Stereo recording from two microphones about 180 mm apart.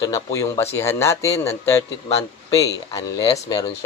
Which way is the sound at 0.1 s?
15° left (ahead or behind).